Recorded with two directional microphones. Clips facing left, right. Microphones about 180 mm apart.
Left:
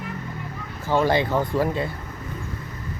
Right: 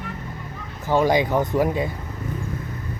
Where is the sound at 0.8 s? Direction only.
15° right (ahead or behind).